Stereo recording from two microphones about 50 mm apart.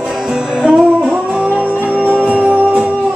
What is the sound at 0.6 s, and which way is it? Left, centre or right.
Music, centre.